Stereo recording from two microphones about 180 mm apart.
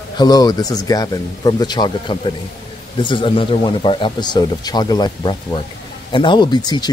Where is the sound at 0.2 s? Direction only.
20° left (ahead or behind).